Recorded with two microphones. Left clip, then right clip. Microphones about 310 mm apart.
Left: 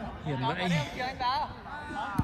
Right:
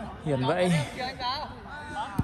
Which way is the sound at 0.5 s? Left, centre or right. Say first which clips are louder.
Right 4 dB; centre.